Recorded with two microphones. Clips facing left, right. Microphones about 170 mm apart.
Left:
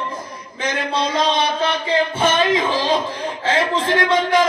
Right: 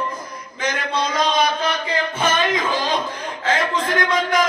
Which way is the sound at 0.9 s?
30° left (ahead or behind).